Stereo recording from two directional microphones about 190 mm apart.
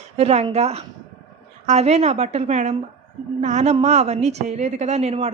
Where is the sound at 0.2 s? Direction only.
35° right (ahead or behind).